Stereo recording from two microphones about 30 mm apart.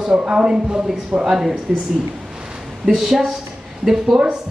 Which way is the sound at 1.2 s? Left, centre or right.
Centre.